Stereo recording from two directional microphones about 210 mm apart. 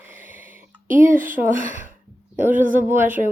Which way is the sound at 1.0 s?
40° right (ahead or behind).